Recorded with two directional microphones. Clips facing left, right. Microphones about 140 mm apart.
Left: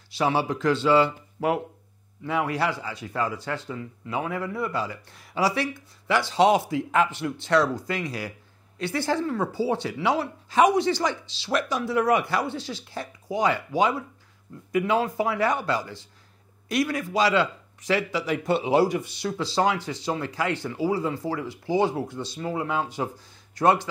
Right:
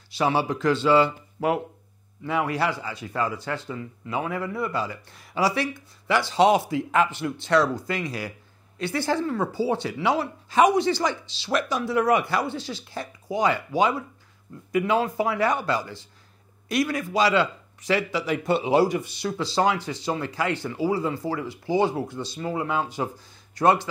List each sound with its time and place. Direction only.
0.2 s speech: 20° right (ahead or behind)